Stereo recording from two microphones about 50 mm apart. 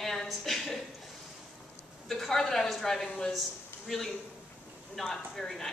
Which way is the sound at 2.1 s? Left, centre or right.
Centre.